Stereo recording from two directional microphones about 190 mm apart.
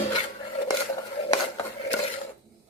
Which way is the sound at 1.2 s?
30° left (ahead or behind).